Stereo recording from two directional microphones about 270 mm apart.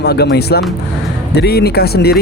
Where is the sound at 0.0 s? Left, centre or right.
Left.